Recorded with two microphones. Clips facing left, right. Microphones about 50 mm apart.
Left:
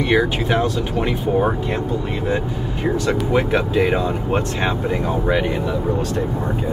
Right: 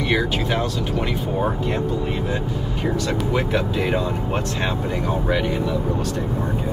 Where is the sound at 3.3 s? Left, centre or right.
Left.